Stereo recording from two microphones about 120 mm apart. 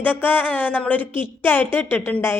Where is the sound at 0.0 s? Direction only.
15° left (ahead or behind).